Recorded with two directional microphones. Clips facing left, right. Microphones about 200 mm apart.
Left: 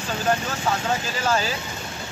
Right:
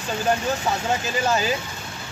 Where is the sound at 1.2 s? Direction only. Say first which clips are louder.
Even; 15° right (ahead or behind).